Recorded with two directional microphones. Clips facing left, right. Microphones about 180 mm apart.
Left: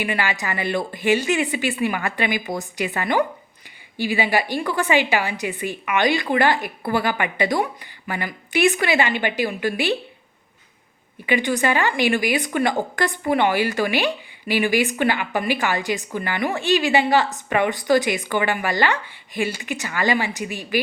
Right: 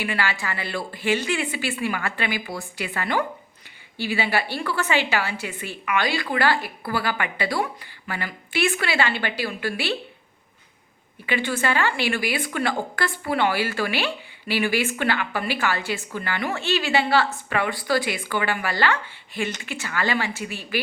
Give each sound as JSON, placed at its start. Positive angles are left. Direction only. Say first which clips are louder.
{"t": 0.0, "sound": "a woman's voice", "louder": "left 2 dB", "side_deg": 15}
{"t": 11.3, "sound": "a woman's voice", "louder": "left 4 dB", "side_deg": 15}